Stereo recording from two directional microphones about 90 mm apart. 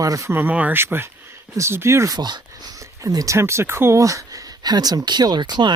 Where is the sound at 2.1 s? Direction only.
50° right (ahead or behind).